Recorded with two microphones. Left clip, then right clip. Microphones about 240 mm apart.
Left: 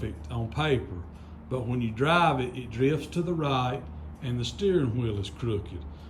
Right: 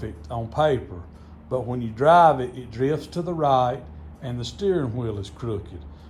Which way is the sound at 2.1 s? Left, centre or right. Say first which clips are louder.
Right 9 dB; centre.